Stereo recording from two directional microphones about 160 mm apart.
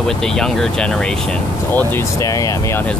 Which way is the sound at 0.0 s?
5° left (ahead or behind).